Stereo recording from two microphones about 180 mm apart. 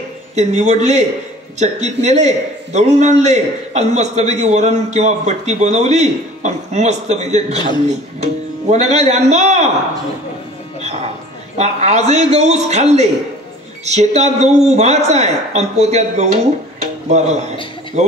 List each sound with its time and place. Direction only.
0.4 s a man's voice: 40° right (ahead or behind)
7.5 s a man's voice: 25° left (ahead or behind)
7.8 s a man's voice: 40° right (ahead or behind)
11.5 s a man's voice: 40° right (ahead or behind)